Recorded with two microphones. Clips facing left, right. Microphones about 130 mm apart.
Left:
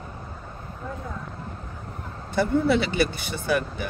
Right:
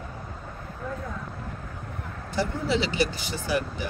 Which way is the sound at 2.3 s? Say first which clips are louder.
Left 5 dB; 55° left (ahead or behind).